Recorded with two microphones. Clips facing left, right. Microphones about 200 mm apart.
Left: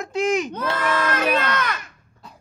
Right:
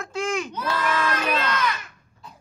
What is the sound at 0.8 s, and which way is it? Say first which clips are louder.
Speech: left 3 dB; 55° left (ahead or behind).